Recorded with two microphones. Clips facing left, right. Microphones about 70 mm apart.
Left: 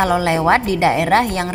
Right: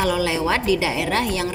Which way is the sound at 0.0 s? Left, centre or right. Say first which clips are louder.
Left 5 dB; left.